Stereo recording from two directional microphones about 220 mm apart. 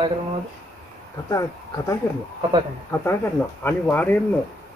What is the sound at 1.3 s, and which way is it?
Speech, 15° left (ahead or behind).